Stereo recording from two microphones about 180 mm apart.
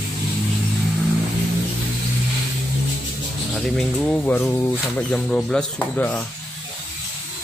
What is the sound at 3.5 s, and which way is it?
Speech, centre (ahead or behind).